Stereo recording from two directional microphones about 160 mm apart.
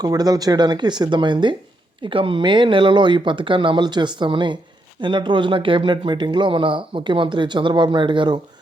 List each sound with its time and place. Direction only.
0.0 s speech: 25° right (ahead or behind)